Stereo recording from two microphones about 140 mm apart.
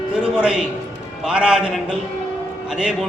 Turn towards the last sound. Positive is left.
turn(degrees=-5)  # may be behind; listen again after turning